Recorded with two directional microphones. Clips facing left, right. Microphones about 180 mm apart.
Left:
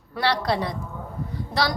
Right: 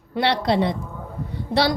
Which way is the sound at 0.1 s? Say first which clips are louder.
Right 3 dB; 25° right (ahead or behind).